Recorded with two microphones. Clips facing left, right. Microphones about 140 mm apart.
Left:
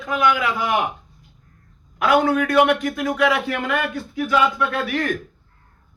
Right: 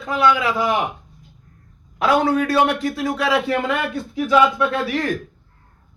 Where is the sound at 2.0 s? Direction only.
30° right (ahead or behind).